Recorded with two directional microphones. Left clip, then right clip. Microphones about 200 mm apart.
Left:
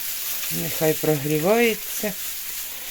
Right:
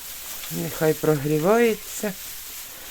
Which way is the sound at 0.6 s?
Centre (ahead or behind).